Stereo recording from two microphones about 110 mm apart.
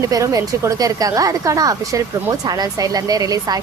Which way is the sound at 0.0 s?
30° right (ahead or behind).